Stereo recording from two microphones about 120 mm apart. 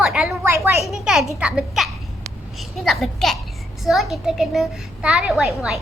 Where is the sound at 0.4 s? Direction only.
20° right (ahead or behind).